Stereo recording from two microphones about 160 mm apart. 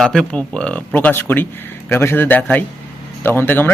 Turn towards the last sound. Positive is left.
turn(degrees=10)  # may be behind; listen again after turning